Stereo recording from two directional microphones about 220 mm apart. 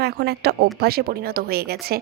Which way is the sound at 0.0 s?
45° right (ahead or behind).